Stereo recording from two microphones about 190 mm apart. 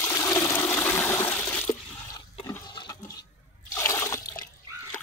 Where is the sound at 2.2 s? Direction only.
20° left (ahead or behind).